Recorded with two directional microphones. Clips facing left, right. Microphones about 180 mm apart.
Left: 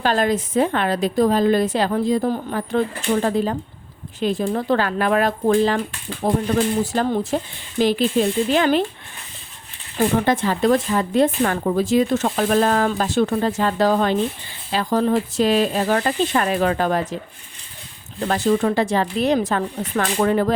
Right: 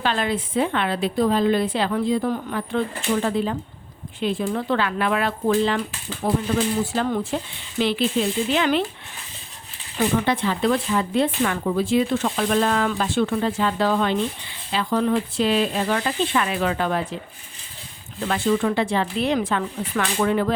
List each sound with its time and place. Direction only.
0.0 s speech: 40° left (ahead or behind)
10.0 s speech: 45° left (ahead or behind)
18.2 s speech: 40° left (ahead or behind)